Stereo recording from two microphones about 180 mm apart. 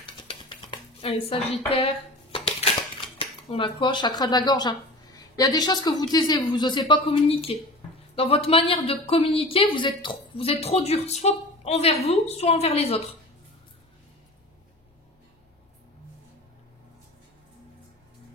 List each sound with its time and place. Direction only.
0.0 s dishes: 25° left (ahead or behind)
1.7 s a sound: 30° left (ahead or behind)
3.2 s speech: 30° left (ahead or behind)